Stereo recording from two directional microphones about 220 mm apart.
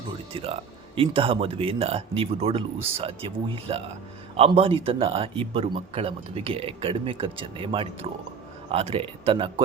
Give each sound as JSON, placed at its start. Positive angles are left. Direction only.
{"t": 0.3, "sound": "speech", "side_deg": -25}